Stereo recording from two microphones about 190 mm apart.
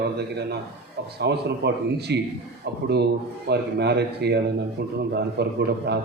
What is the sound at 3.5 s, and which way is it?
Speech, 60° right (ahead or behind).